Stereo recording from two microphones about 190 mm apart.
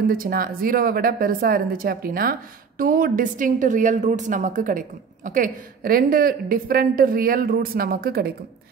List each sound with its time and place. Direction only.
0.0 s a woman's voice: 50° right (ahead or behind)